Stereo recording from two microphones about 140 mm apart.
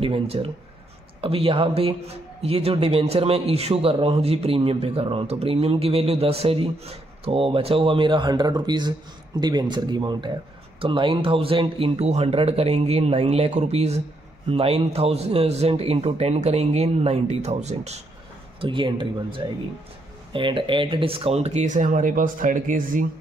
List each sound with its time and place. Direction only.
0.0 s a man's voice: 40° right (ahead or behind)
18.6 s a man's voice: 35° right (ahead or behind); by 23.0 s 75° right (ahead or behind)